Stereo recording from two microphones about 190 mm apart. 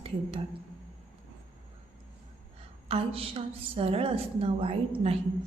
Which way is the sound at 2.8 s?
30° right (ahead or behind).